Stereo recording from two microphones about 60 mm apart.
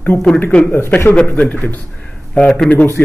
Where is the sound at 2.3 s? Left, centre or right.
Centre.